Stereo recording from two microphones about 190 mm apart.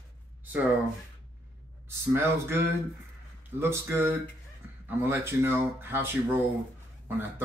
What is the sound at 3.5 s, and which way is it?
Speech, 10° right (ahead or behind).